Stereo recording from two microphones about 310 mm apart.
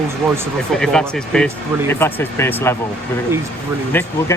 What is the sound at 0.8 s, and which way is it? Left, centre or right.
Speech, centre.